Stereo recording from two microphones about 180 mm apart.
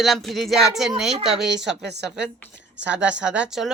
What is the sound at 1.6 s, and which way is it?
Speech, 70° right (ahead or behind).